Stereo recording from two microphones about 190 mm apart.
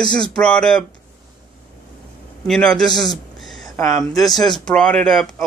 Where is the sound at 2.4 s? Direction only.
5° left (ahead or behind).